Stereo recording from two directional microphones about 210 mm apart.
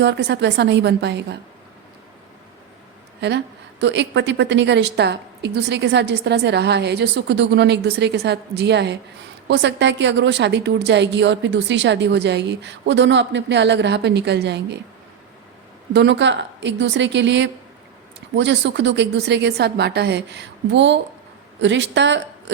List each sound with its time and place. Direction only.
0.0 s a woman's voice: 55° right (ahead or behind)
3.2 s a woman's voice: 55° right (ahead or behind)
15.9 s a woman's voice: 55° right (ahead or behind)